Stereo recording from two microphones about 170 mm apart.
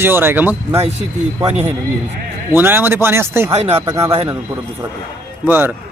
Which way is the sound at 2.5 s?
10° right (ahead or behind).